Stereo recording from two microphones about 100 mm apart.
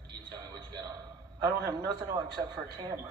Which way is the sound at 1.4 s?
40° right (ahead or behind).